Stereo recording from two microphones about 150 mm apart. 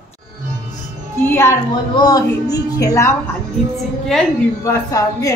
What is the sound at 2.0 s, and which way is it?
Speech, 25° left (ahead or behind).